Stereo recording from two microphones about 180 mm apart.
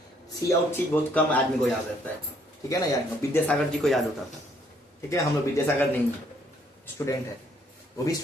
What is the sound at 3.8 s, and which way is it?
Speech, centre (ahead or behind).